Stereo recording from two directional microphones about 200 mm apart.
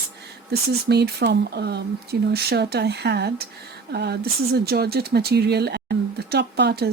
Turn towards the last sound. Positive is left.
turn(degrees=-55)  # may be behind; listen again after turning